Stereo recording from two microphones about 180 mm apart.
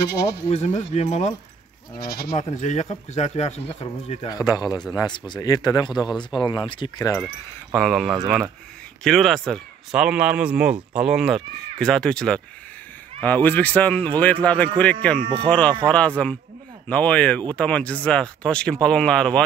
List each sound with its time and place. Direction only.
0.1 s speech: 60° left (ahead or behind)
0.5 s speech: 35° left (ahead or behind)
2.0 s speech: 55° left (ahead or behind)
2.3 s speech: 40° left (ahead or behind)
4.3 s speech: 20° left (ahead or behind)
7.7 s speech: centre (ahead or behind)